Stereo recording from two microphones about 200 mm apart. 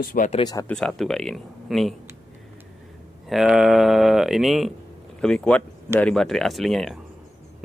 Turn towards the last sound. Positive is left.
turn(degrees=0)  # may be behind; listen again after turning